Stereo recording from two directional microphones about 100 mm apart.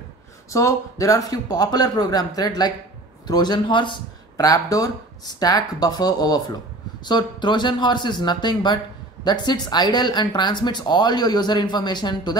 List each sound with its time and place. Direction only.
0.5 s speech: 35° left (ahead or behind); by 4.0 s 55° left (ahead or behind)
4.4 s speech: 35° left (ahead or behind)